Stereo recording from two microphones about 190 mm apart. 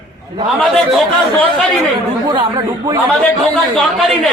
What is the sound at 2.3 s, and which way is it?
Speech, 25° right (ahead or behind).